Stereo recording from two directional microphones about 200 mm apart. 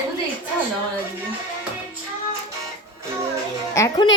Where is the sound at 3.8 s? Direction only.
15° left (ahead or behind).